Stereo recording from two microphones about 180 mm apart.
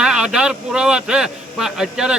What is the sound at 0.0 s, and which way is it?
Speech, 5° right (ahead or behind).